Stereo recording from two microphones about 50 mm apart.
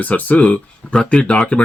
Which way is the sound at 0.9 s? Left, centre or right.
Left.